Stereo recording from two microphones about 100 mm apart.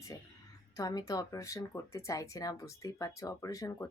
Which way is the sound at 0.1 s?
35° left (ahead or behind).